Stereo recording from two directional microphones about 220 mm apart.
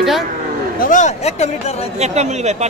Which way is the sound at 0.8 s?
35° left (ahead or behind).